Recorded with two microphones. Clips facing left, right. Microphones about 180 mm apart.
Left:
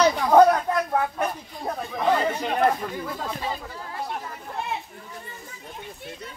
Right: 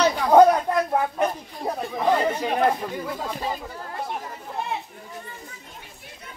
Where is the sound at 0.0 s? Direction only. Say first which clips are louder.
Right 1 dB; 10° right (ahead or behind).